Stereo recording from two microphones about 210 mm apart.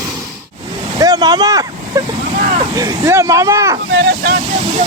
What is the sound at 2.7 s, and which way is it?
Speech, 15° right (ahead or behind).